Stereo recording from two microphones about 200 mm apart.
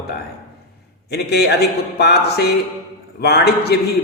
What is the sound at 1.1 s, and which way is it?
A man's voice, 55° left (ahead or behind).